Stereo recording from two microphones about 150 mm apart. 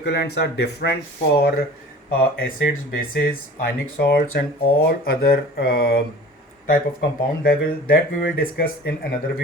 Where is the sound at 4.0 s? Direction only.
90° left.